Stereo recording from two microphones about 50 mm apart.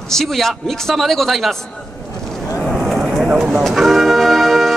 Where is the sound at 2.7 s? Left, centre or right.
Centre.